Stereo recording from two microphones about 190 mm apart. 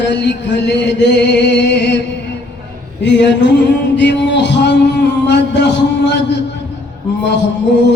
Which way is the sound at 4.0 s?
65° left (ahead or behind).